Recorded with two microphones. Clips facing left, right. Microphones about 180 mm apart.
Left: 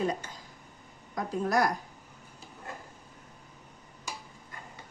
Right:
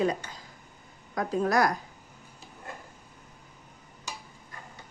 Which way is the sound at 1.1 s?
85° right.